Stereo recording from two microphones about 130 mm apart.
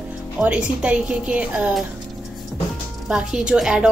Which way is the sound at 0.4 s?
10° right (ahead or behind).